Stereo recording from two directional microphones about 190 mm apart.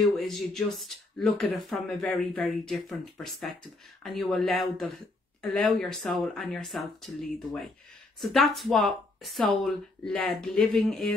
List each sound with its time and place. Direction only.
0.0 s speech: centre (ahead or behind)